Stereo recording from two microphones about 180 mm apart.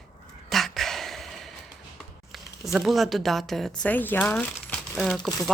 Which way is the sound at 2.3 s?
Centre (ahead or behind).